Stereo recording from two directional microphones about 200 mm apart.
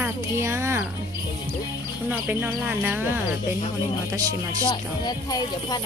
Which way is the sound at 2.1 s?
10° right (ahead or behind).